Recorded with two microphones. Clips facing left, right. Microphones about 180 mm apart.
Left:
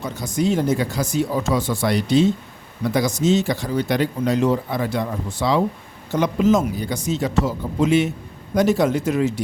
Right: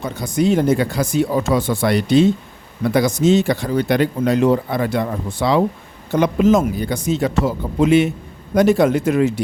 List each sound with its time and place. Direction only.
0.0 s speech: 60° right (ahead or behind)